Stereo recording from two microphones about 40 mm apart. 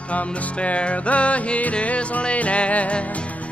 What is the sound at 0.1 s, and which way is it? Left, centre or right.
Music, left.